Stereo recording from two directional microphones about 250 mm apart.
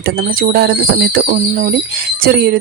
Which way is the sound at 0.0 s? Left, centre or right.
Right.